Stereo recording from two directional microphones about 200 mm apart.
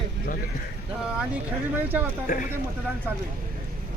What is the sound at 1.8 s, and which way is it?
Speech, 10° right (ahead or behind).